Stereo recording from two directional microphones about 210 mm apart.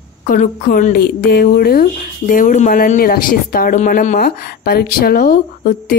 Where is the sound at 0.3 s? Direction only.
40° left (ahead or behind).